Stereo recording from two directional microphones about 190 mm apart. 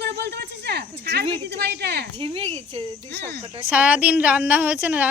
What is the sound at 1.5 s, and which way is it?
Speech, 60° right (ahead or behind).